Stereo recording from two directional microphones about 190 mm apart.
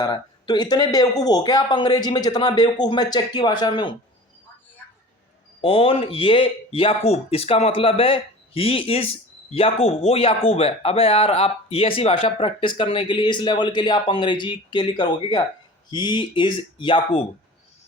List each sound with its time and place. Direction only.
0.0 s speech: 20° left (ahead or behind)
5.6 s speech: 30° left (ahead or behind)